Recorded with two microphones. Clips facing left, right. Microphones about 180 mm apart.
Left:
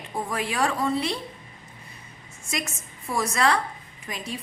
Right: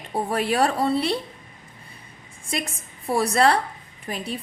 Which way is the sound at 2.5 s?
30° right (ahead or behind).